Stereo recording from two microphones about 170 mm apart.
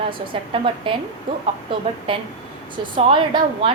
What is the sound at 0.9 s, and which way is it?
Speech, 30° right (ahead or behind).